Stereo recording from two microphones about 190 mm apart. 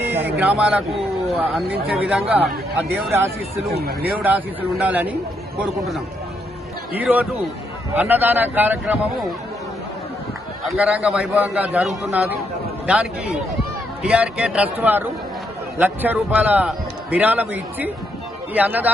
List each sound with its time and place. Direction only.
0.0 s a sound: 10° right (ahead or behind)
0.3 s a man's voice: 5° right (ahead or behind)
3.1 s a man's voice: 15° right (ahead or behind)
3.7 s speech: 55° right (ahead or behind)
4.2 s a man's voice: 10° right (ahead or behind)
10.6 s a man's voice: 5° right (ahead or behind)